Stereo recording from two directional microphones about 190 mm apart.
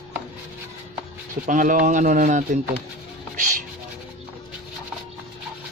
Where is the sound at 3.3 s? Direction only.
45° right (ahead or behind).